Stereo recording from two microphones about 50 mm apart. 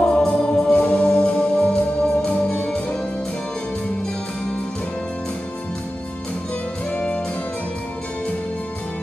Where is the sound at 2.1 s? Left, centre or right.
Left.